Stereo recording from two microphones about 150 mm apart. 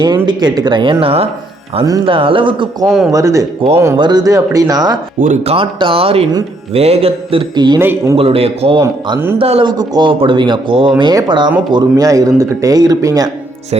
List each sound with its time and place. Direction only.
0.0 s speech: 30° right (ahead or behind)
3.1 s speech: 20° right (ahead or behind)
3.6 s speech: 35° right (ahead or behind)
5.5 s speech: 35° right (ahead or behind)
7.8 s speech: 15° right (ahead or behind)
8.1 s speech: 40° right (ahead or behind)
8.8 s speech: 20° right (ahead or behind)
9.4 s speech: 35° right (ahead or behind)